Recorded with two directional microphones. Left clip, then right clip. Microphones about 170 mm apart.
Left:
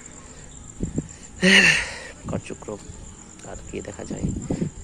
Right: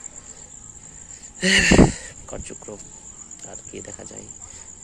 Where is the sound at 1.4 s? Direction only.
15° right (ahead or behind).